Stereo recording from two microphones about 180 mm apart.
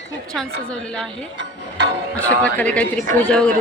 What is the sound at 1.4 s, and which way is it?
Music, 70° right (ahead or behind).